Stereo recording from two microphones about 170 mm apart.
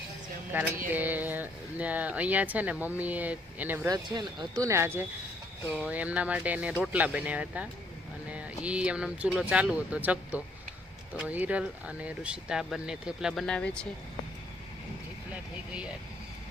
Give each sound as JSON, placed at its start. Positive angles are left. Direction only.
{"t": 0.5, "sound": "speech", "side_deg": -10}
{"t": 3.8, "sound": "speech", "side_deg": -25}